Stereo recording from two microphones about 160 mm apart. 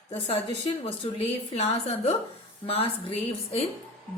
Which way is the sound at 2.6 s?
35° left (ahead or behind).